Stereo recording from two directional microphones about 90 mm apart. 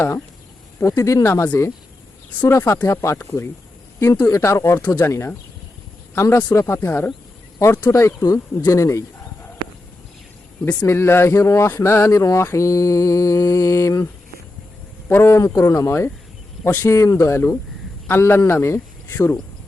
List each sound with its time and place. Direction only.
0.8 s speech: 35° left (ahead or behind)
10.8 s speech: 25° left (ahead or behind)
15.1 s speech: 25° left (ahead or behind)